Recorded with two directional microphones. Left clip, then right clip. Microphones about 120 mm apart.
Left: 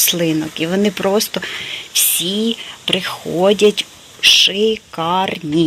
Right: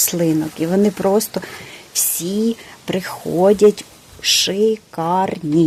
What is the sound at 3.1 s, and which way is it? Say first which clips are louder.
Speech: even; 20° right (ahead or behind).